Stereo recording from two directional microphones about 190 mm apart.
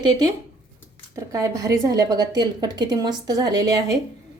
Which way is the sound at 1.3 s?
15° right (ahead or behind).